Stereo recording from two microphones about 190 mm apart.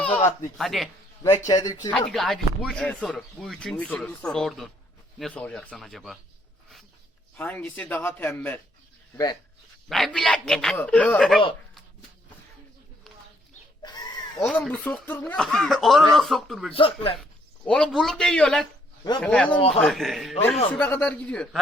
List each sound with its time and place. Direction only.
0.0 s speech: 10° left (ahead or behind)
1.5 s speech: 20° left (ahead or behind)
1.9 s speech: centre (ahead or behind)
7.3 s speech: 10° left (ahead or behind)
9.9 s speech: centre (ahead or behind)
13.8 s chicken: 20° left (ahead or behind)
14.3 s speech: centre (ahead or behind)
16.7 s speech: 30° left (ahead or behind)
17.7 s speech: 5° left (ahead or behind)
19.5 s a man's voice: 30° left (ahead or behind)
19.8 s speech: centre (ahead or behind)